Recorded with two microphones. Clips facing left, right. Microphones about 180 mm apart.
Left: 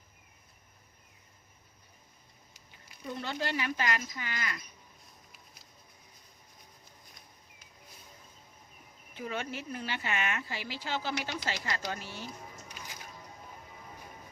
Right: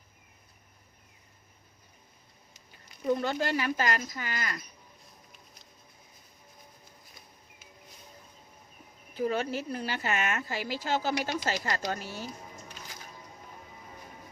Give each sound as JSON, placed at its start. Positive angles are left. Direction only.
{"t": 3.1, "sound": "speech", "side_deg": -45}
{"t": 9.1, "sound": "speech", "side_deg": -35}